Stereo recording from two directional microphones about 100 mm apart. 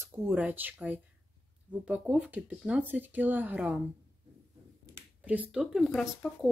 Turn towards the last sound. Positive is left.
turn(degrees=0)  # may be behind; listen again after turning